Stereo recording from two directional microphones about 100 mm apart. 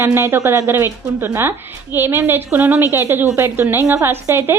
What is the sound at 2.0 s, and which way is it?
A woman's voice, 20° right (ahead or behind).